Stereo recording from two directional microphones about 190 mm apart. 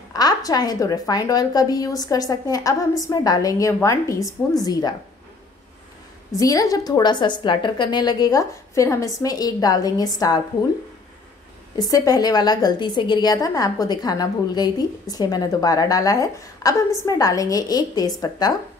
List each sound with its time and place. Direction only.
0.1 s a woman's voice: 20° left (ahead or behind)
6.3 s a woman's voice: 20° left (ahead or behind)
11.7 s a woman's voice: 20° left (ahead or behind)